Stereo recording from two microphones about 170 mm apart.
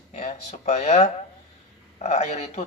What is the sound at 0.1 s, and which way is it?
A man's voice, 40° left (ahead or behind).